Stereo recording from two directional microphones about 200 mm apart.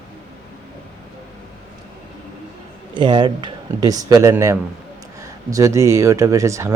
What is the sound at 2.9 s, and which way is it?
A man's voice, 25° right (ahead or behind).